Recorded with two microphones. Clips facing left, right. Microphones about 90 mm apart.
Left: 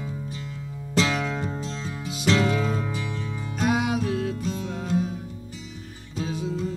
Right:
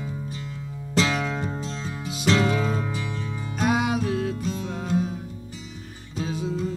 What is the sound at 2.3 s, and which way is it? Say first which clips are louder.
Music: even; 35° right (ahead or behind).